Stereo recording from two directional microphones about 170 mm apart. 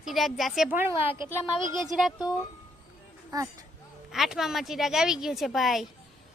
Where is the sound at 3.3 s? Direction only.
20° right (ahead or behind).